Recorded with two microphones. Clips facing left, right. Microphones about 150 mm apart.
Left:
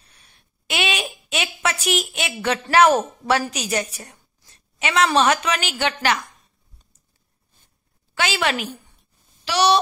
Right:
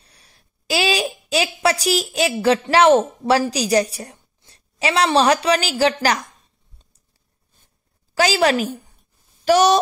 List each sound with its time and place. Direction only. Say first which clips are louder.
0.0 s a sound: right 2 dB; 35° right (ahead or behind)
2.6 s a woman's voice: right 1 dB; 25° right (ahead or behind)
8.1 s a woman's voice: right 6 dB; 40° right (ahead or behind)